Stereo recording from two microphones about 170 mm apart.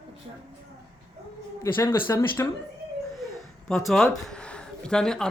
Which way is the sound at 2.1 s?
15° left (ahead or behind).